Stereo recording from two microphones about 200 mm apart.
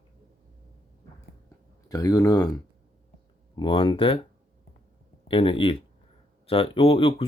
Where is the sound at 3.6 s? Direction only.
25° left (ahead or behind).